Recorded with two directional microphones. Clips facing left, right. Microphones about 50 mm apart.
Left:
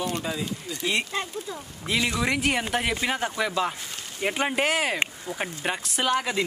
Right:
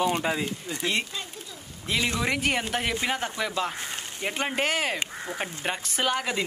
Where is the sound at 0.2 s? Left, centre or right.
Right.